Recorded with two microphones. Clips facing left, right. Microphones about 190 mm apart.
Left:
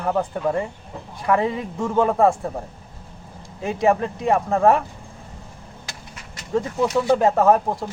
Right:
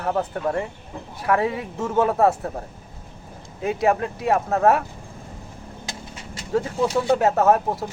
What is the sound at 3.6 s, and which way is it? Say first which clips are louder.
Speech: left 1 dB; 5° right (ahead or behind).